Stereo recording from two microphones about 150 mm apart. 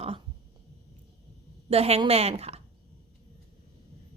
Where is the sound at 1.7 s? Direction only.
40° right (ahead or behind).